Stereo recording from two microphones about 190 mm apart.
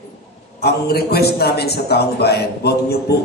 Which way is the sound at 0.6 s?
55° left (ahead or behind).